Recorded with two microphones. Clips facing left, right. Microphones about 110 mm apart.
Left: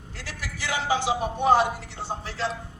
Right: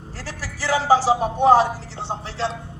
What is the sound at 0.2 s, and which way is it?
A man's voice, 35° right (ahead or behind).